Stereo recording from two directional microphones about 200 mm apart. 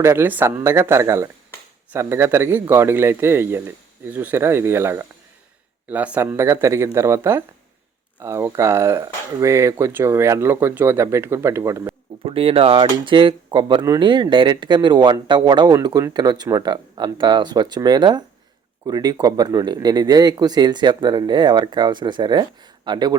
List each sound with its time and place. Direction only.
0.0 s speech: 10° right (ahead or behind)
12.2 s speech: 25° right (ahead or behind)